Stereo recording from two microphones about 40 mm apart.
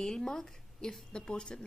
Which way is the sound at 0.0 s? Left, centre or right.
Centre.